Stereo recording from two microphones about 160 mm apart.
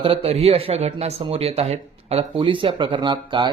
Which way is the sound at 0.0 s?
35° right (ahead or behind).